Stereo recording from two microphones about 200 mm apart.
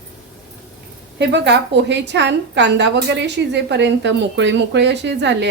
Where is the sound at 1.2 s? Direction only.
60° right (ahead or behind).